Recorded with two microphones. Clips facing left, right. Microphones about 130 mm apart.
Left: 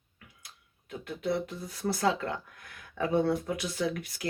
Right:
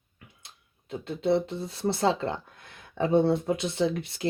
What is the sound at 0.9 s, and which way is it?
Speech, 25° right (ahead or behind).